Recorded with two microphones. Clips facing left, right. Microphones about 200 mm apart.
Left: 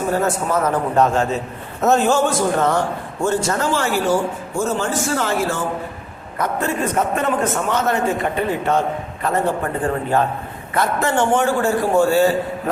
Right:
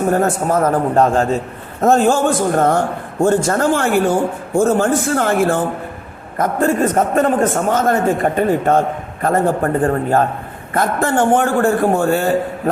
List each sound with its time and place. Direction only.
0.1 s a man's voice: 50° right (ahead or behind)